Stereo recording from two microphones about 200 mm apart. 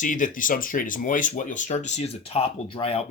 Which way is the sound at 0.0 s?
40° left (ahead or behind).